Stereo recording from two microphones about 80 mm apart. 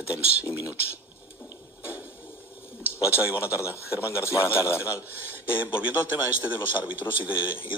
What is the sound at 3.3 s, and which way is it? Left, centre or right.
A man's voice, left.